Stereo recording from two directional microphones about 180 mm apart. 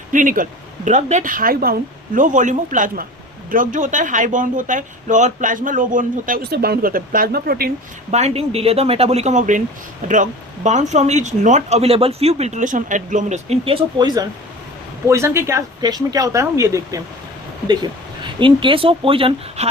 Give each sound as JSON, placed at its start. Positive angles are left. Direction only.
{"t": 0.1, "sound": "speech", "side_deg": -45}
{"t": 8.1, "sound": "speech", "side_deg": -35}
{"t": 18.2, "sound": "speech", "side_deg": -25}